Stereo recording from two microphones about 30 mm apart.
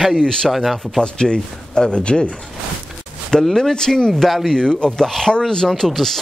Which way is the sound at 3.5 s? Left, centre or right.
Centre.